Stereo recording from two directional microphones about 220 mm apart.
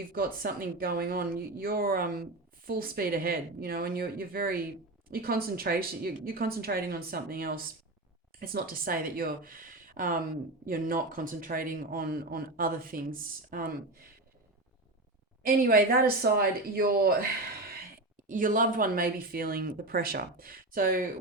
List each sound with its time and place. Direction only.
0.1 s a woman's voice: 40° right (ahead or behind)
15.4 s a woman's voice: 40° right (ahead or behind)
18.3 s speech: 40° right (ahead or behind)